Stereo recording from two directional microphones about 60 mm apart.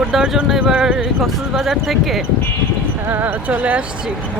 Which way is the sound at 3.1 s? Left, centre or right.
Right.